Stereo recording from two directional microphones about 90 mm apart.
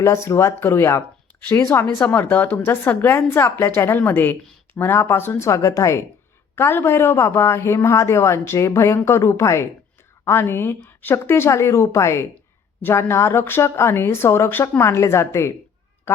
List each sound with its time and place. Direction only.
0.3 s speech: 30° left (ahead or behind)
5.5 s speech: 35° left (ahead or behind)